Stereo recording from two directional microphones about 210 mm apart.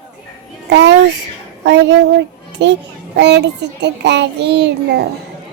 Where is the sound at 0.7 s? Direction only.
55° right (ahead or behind).